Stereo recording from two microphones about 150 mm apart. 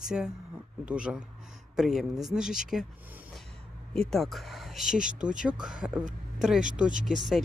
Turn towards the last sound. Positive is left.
turn(degrees=0)  # may be behind; listen again after turning